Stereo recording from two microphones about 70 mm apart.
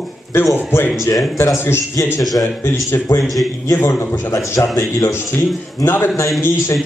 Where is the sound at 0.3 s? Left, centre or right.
Left.